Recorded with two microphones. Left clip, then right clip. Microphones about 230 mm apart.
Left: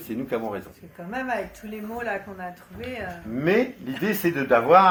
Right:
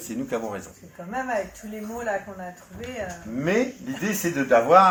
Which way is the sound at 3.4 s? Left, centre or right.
Centre.